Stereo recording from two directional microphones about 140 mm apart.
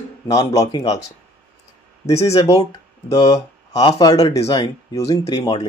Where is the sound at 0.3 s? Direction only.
20° left (ahead or behind).